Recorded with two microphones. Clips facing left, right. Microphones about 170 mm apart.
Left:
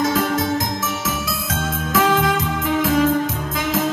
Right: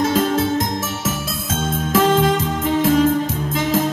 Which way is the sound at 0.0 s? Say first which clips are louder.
Right 2 dB; 30° right (ahead or behind).